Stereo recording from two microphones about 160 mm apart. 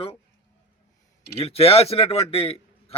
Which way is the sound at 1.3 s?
35° left (ahead or behind).